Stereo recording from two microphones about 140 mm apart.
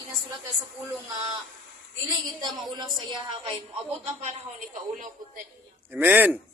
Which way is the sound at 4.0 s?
55° right (ahead or behind).